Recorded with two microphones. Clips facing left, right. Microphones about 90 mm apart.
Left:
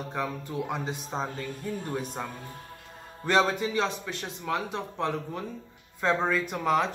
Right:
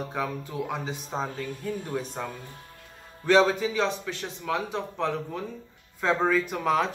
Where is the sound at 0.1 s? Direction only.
Centre (ahead or behind).